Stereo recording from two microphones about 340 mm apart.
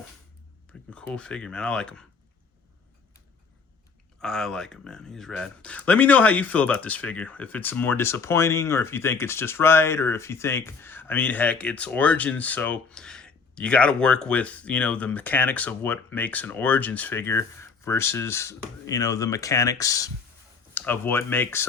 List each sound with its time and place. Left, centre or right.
0.7 s speech: centre
4.2 s speech: centre